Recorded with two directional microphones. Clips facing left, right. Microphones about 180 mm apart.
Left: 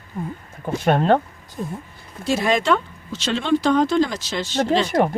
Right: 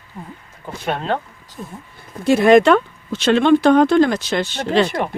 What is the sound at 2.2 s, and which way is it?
Speech, 60° right (ahead or behind).